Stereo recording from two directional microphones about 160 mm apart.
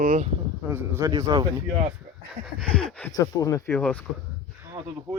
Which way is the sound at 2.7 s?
5° left (ahead or behind).